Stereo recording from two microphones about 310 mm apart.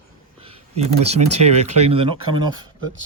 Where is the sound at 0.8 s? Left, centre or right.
Centre.